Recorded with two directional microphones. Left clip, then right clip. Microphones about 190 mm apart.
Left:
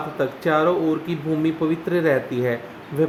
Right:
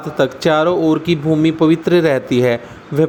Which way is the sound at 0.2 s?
40° right (ahead or behind).